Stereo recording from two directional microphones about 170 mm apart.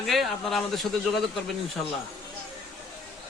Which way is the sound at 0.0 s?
Centre (ahead or behind).